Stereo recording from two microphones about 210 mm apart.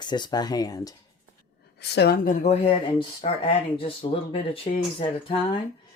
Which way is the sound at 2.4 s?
30° left (ahead or behind).